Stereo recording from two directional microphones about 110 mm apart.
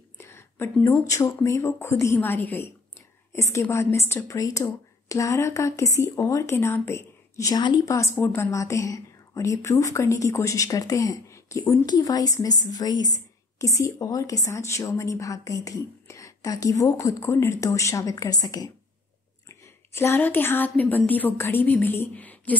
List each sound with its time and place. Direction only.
0.2 s a woman's voice: 25° left (ahead or behind)
19.9 s a woman's voice: 20° left (ahead or behind)